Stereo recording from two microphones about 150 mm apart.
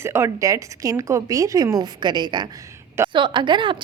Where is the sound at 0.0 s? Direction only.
15° right (ahead or behind).